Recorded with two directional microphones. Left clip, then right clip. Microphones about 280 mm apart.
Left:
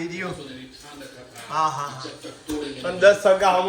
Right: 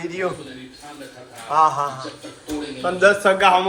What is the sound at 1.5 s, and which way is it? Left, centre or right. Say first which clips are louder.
Speech: right 7 dB; centre.